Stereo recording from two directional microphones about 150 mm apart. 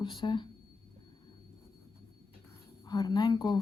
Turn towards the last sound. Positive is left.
turn(degrees=25)  # may be behind; listen again after turning